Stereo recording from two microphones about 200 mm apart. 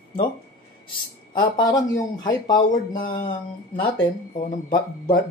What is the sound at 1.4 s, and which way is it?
Speech, 20° left (ahead or behind).